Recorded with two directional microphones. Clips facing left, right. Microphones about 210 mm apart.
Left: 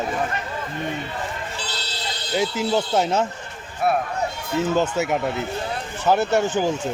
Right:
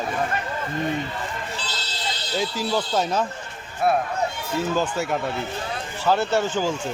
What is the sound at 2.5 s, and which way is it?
Speech, 25° left (ahead or behind).